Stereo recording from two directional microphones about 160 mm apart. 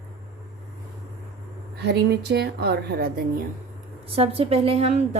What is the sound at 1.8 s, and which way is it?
A woman's voice, 90° right.